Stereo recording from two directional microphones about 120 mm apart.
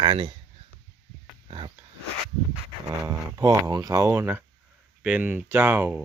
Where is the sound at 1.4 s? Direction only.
45° right (ahead or behind).